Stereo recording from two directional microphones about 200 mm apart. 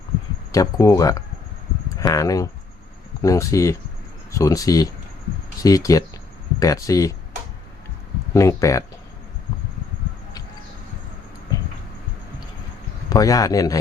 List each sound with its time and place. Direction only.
0.5 s speech: 15° left (ahead or behind)
8.3 s speech: 15° left (ahead or behind)
13.1 s speech: 15° left (ahead or behind)